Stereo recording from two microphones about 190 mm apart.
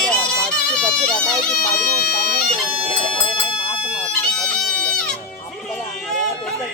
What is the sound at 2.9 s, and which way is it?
Music, 25° left (ahead or behind).